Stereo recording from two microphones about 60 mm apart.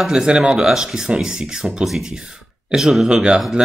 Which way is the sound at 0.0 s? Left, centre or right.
Centre.